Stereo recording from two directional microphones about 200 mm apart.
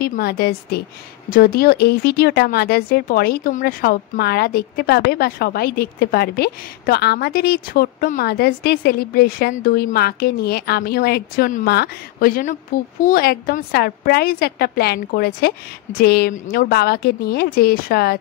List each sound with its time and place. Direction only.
0.0 s speech: 50° left (ahead or behind)